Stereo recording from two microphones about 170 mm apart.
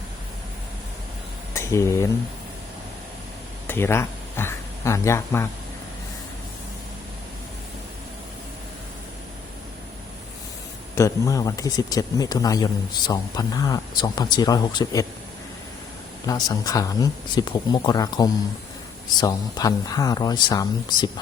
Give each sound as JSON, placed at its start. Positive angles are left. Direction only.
{"t": 1.5, "sound": "speech", "side_deg": 15}
{"t": 3.7, "sound": "a sound", "side_deg": 15}
{"t": 10.9, "sound": "speech", "side_deg": 20}
{"t": 16.2, "sound": "speech", "side_deg": 20}